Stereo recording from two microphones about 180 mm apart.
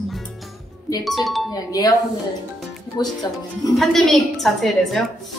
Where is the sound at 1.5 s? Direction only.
20° left (ahead or behind).